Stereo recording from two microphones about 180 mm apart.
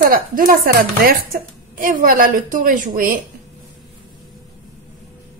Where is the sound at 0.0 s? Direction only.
50° right (ahead or behind).